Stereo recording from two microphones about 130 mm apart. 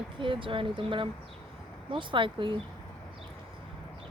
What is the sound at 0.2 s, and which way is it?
A woman's voice, 40° right (ahead or behind).